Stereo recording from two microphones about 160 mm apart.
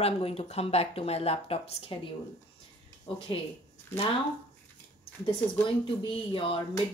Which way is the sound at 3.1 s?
30° left (ahead or behind).